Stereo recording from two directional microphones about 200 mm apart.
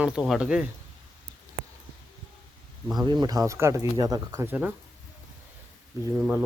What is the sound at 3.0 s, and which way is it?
Speech, 20° right (ahead or behind).